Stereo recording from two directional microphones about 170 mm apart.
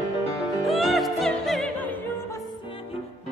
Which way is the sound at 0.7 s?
Centre (ahead or behind).